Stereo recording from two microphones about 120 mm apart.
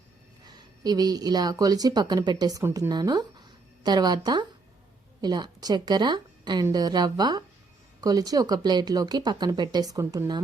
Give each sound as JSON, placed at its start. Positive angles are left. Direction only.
{"t": 0.4, "sound": "speech", "side_deg": -35}